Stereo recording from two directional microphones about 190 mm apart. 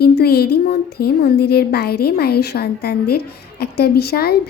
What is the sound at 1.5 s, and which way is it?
Speech, 55° left (ahead or behind).